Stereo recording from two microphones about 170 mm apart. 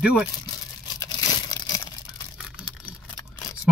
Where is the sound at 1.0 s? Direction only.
20° left (ahead or behind).